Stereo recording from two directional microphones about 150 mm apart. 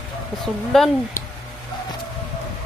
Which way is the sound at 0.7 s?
Centre (ahead or behind).